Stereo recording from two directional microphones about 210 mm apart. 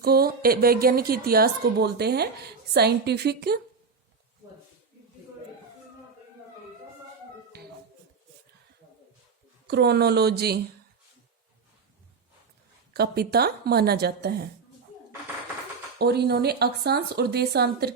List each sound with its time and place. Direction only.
0.0 s a woman's voice: 45° right (ahead or behind)
9.6 s a woman's voice: 50° right (ahead or behind)
12.9 s a woman's voice: 50° right (ahead or behind)
16.0 s a woman's voice: 50° right (ahead or behind)